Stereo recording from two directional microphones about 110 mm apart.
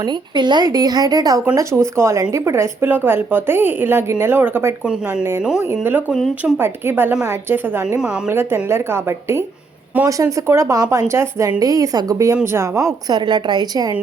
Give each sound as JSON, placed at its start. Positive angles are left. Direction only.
{"t": 0.0, "sound": "a woman's voice", "side_deg": -45}
{"t": 7.9, "sound": "speech", "side_deg": -5}
{"t": 8.3, "sound": "a woman's voice", "side_deg": -20}
{"t": 13.1, "sound": "speech", "side_deg": -40}